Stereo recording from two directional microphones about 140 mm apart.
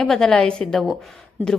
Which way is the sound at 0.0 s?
5° left (ahead or behind).